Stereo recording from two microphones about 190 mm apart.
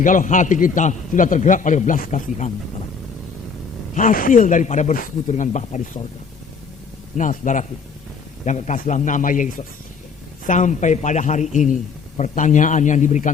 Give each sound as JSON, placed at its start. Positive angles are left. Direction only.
{"t": 0.0, "sound": "a man's voice", "side_deg": 45}
{"t": 3.9, "sound": "a man's voice", "side_deg": 45}
{"t": 7.2, "sound": "a man's voice", "side_deg": 40}